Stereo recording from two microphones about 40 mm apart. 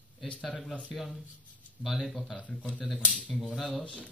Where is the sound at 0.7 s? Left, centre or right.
Centre.